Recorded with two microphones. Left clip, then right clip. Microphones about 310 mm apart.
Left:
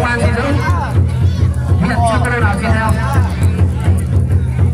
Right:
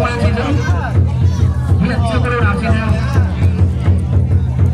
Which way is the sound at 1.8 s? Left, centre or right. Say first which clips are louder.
Left 4 dB; left.